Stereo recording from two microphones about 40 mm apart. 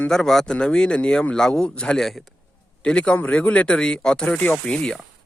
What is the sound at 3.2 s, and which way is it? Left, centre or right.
Speech, left.